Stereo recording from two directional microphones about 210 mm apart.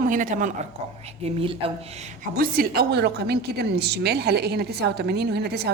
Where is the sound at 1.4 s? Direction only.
25° right (ahead or behind).